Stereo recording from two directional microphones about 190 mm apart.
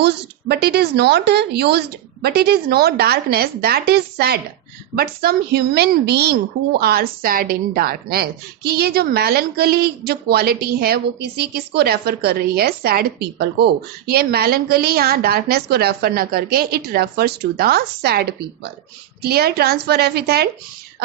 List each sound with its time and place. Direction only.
0.0 s a woman's voice: 60° right (ahead or behind)